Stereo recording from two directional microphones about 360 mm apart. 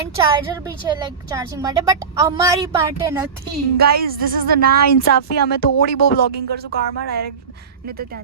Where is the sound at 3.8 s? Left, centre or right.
Right.